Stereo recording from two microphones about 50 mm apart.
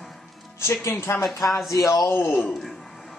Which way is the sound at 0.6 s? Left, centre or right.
Left.